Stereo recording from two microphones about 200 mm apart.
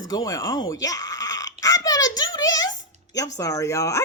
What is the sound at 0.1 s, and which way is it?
Speech, 20° left (ahead or behind).